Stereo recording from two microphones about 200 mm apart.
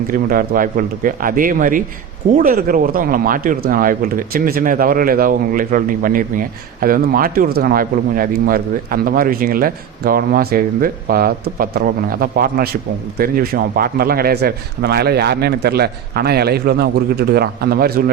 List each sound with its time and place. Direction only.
0.1 s speech: 45° right (ahead or behind)